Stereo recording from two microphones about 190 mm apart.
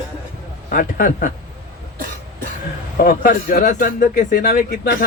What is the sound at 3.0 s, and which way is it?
Speech, 50° left (ahead or behind).